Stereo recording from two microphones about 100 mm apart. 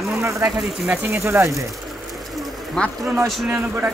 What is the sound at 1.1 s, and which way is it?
Speech, 25° right (ahead or behind).